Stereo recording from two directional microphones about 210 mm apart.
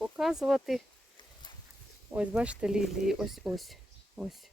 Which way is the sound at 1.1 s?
20° left (ahead or behind).